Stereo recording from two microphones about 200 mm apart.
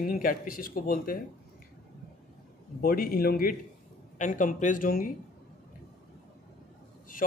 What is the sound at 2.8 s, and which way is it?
Speech, 45° left (ahead or behind).